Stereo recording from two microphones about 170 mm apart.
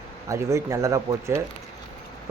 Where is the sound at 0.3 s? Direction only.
20° right (ahead or behind).